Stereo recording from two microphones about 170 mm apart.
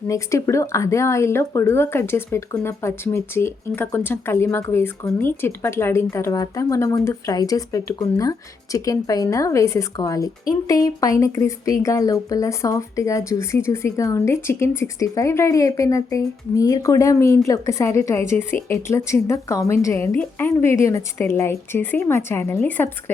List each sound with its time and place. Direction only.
0.1 s speech: 20° left (ahead or behind)